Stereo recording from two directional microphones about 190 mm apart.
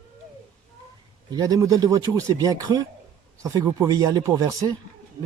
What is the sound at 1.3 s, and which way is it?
Speech, 20° right (ahead or behind).